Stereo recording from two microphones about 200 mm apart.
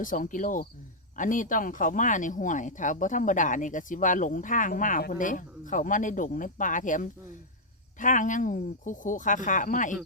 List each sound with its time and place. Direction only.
0.0 s speech: 40° left (ahead or behind)